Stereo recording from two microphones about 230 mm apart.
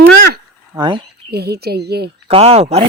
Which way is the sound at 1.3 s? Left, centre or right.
Right.